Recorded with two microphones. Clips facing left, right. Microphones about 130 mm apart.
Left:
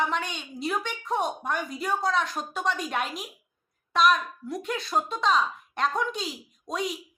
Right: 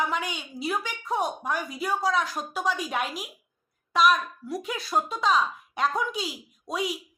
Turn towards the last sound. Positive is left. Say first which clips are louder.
# right 1 dB
turn(degrees=-5)  # may be behind; listen again after turning